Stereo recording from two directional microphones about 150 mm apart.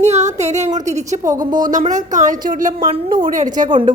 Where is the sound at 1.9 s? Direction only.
55° right (ahead or behind).